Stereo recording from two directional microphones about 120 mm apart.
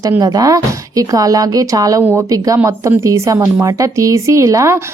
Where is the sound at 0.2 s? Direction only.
30° right (ahead or behind).